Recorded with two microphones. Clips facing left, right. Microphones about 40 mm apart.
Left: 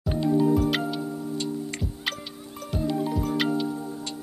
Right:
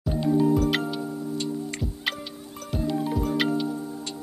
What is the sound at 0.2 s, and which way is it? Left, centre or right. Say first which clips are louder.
Music: even; centre.